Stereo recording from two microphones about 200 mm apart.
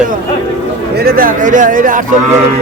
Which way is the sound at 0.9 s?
45° right (ahead or behind).